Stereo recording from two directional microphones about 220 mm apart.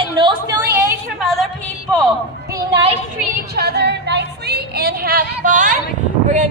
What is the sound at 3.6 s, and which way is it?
Speech, 50° right (ahead or behind).